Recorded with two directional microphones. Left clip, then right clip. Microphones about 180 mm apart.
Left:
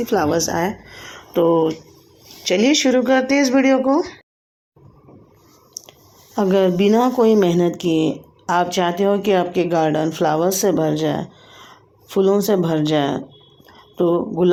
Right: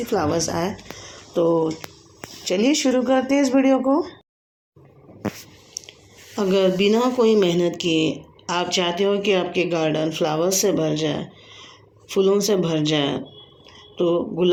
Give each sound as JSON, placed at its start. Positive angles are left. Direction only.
{"t": 0.0, "sound": "speech", "side_deg": 25}
{"t": 5.8, "sound": "chewing", "side_deg": 40}
{"t": 6.3, "sound": "speech", "side_deg": 40}